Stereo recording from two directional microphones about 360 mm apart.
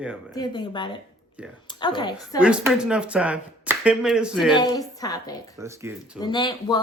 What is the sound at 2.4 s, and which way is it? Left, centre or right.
Speech, centre.